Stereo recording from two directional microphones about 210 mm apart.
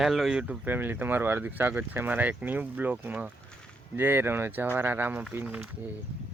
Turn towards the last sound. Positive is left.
turn(degrees=-10)  # may be behind; listen again after turning